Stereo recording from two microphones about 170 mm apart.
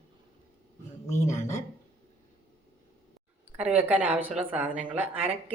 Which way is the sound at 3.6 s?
5° right (ahead or behind).